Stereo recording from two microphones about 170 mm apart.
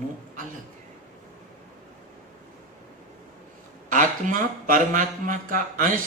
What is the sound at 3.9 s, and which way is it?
Speech, 50° right (ahead or behind).